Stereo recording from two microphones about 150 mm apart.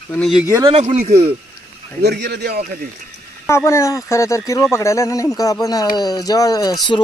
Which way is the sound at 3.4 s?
20° left (ahead or behind).